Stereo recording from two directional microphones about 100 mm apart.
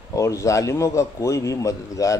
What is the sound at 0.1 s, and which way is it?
A man's voice, 30° left (ahead or behind).